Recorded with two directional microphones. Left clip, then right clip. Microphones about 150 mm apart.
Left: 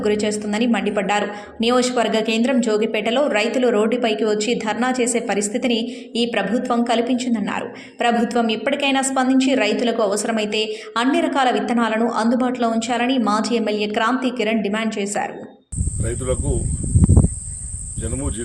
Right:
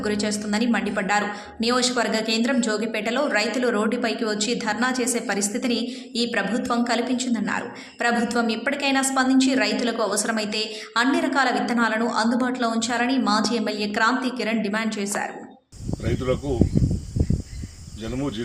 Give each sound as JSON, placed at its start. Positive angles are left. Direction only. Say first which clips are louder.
{"t": 0.0, "sound": "speech", "louder": "left 6 dB", "side_deg": 20}